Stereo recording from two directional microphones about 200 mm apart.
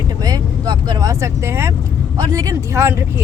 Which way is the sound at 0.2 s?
20° right (ahead or behind).